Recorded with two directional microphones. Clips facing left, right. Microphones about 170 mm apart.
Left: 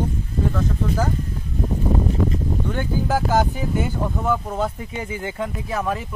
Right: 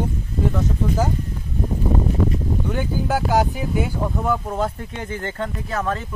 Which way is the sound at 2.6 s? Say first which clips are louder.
Even; 5° right (ahead or behind).